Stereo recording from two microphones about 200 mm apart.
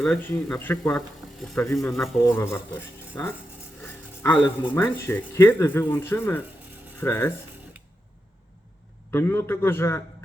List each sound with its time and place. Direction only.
0.0 s speech: 10° left (ahead or behind)
9.0 s speech: 10° left (ahead or behind)